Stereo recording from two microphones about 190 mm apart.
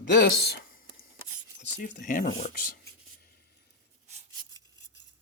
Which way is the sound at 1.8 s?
45° left (ahead or behind).